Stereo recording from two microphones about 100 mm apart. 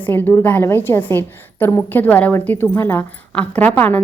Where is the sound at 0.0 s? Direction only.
20° left (ahead or behind).